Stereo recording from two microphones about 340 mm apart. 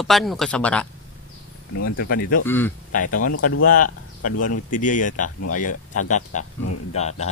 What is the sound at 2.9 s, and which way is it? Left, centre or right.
Speech, left.